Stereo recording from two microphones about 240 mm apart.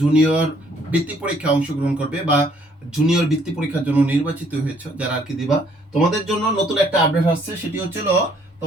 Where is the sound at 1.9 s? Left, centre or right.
Centre.